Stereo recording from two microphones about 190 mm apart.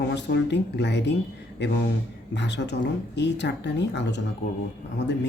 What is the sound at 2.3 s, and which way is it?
Speech, 65° left (ahead or behind).